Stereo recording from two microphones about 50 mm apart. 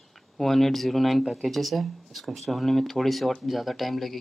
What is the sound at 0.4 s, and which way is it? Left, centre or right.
Speech, centre.